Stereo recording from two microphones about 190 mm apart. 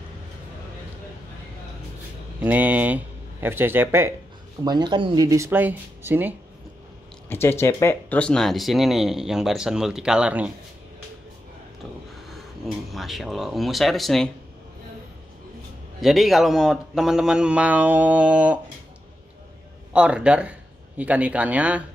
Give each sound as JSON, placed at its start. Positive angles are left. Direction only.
{"t": 2.4, "sound": "speech", "side_deg": -10}
{"t": 4.6, "sound": "speech", "side_deg": -25}
{"t": 7.2, "sound": "speech", "side_deg": 10}
{"t": 12.9, "sound": "speech", "side_deg": 0}
{"t": 16.0, "sound": "speech", "side_deg": 0}
{"t": 19.9, "sound": "speech", "side_deg": -5}